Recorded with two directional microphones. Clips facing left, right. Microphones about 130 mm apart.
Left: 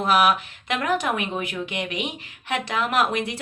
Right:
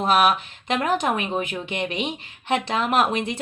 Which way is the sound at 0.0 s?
25° right (ahead or behind).